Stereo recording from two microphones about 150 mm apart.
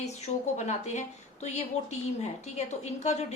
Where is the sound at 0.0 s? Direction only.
50° left (ahead or behind).